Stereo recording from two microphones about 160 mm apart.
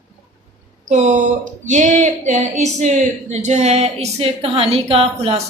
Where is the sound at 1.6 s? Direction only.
50° right (ahead or behind).